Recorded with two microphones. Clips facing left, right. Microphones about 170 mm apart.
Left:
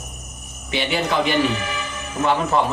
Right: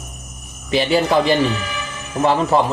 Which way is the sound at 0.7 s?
35° right (ahead or behind).